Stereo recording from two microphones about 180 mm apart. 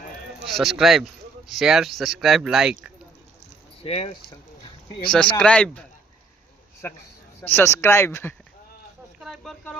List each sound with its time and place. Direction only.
0.5 s speech: centre (ahead or behind)
3.8 s speech: 35° left (ahead or behind)
5.4 s speech: 5° left (ahead or behind)
7.4 s speech: 15° left (ahead or behind)
9.2 s a sound: centre (ahead or behind)